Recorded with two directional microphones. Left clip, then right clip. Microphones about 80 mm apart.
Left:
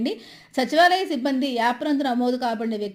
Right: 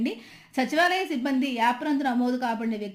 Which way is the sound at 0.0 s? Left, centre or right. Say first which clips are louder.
Left 3 dB; left.